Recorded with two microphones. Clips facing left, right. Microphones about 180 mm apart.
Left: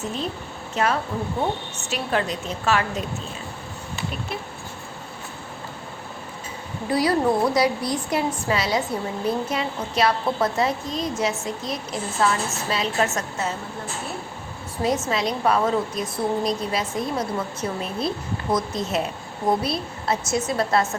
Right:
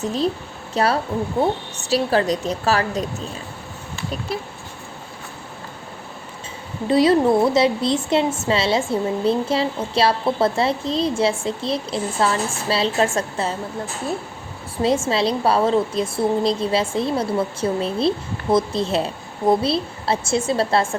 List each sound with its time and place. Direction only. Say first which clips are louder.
0.0 s a woman's voice: right 7 dB; 35° right (ahead or behind)
6.8 s a woman's voice: right 5 dB; 25° right (ahead or behind)
14.8 s a woman's voice: right 4 dB; 30° right (ahead or behind)